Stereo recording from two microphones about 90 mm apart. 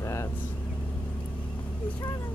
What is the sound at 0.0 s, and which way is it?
Vehicle, 35° left (ahead or behind).